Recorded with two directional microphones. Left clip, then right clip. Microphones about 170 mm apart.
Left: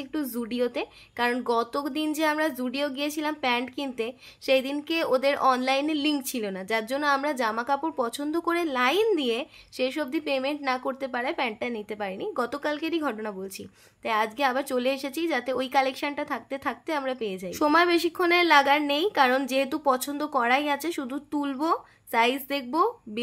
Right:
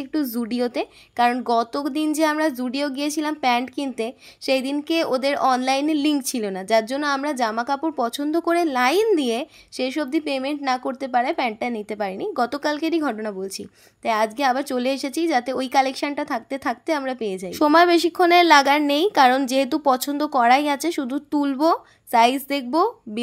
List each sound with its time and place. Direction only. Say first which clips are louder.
0.1 s a woman's voice: right 6 dB; 30° right (ahead or behind)